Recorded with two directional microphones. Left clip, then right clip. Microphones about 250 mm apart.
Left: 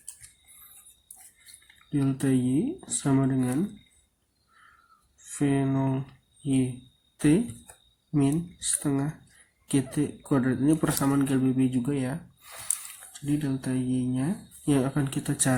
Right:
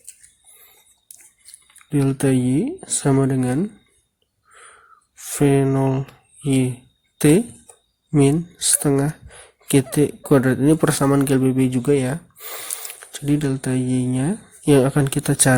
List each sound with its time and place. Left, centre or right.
1.9 s speech: right
5.4 s speech: right